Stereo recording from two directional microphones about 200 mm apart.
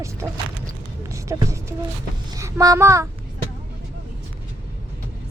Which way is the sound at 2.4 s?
15° right (ahead or behind).